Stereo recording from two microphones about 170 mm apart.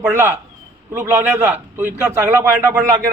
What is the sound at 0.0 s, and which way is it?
A man's voice, 10° right (ahead or behind).